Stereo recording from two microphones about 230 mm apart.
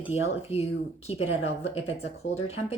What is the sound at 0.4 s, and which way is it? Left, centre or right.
Speech, left.